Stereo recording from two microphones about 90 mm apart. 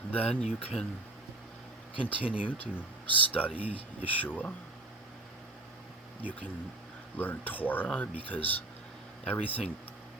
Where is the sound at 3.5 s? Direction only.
90° left.